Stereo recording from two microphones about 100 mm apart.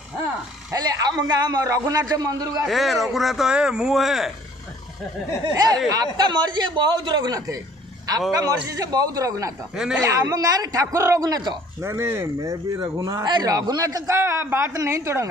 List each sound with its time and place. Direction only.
0.7 s a man's voice: 40° right (ahead or behind)
2.6 s a man's voice: centre (ahead or behind)
5.5 s a man's voice: 40° right (ahead or behind)
11.8 s speech: 25° right (ahead or behind)
12.8 s a man's voice: 45° right (ahead or behind); by 15.2 s 30° right (ahead or behind)